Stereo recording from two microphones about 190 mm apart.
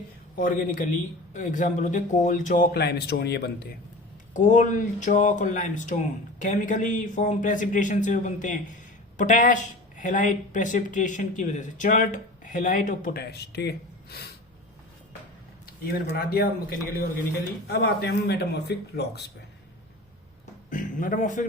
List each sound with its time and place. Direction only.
0.3 s speech: 45° left (ahead or behind)
2.7 s a man's voice: 60° left (ahead or behind)
4.4 s speech: 40° left (ahead or behind); by 14.3 s 60° left (ahead or behind)
16.1 s a man's voice: 55° left (ahead or behind)
20.7 s speech: 45° left (ahead or behind)